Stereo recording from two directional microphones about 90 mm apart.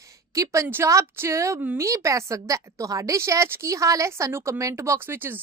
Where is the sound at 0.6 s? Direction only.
25° right (ahead or behind).